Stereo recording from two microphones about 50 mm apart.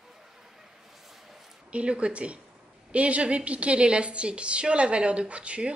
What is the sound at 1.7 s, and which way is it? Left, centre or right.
A woman's voice, right.